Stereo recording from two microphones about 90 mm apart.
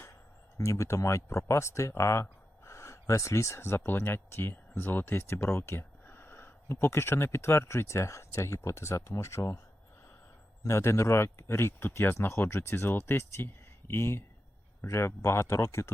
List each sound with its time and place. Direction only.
0.6 s speech: 35° left (ahead or behind)
10.6 s speech: 30° left (ahead or behind)